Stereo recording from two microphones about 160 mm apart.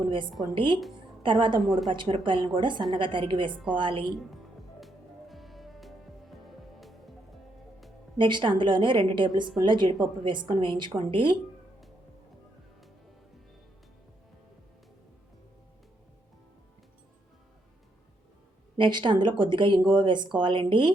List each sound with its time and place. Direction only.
0.5 s a woman's voice: 30° right (ahead or behind)
1.6 s speech: centre (ahead or behind)
1.9 s a woman's voice: 30° right (ahead or behind)
4.8 s music: centre (ahead or behind)
8.2 s speech: 30° right (ahead or behind)
18.8 s speech: 30° right (ahead or behind)